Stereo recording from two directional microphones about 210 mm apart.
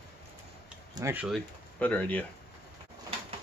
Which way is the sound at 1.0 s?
15° right (ahead or behind).